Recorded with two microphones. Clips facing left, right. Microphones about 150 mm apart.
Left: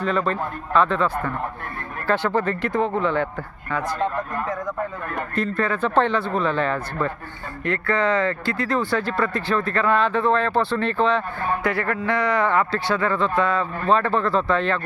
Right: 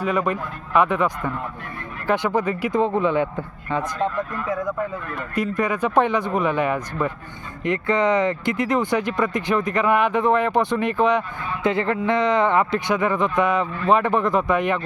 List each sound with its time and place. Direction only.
0.0 s speech: 15° right (ahead or behind)
4.4 s speech: 10° right (ahead or behind)